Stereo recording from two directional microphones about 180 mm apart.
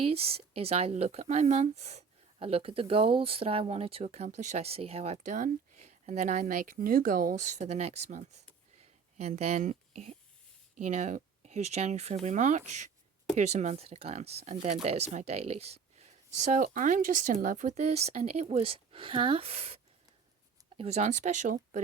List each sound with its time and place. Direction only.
0.0 s speech: 35° right (ahead or behind)